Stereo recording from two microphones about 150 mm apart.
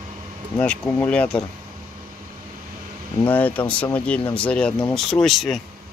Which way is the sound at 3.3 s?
10° left (ahead or behind).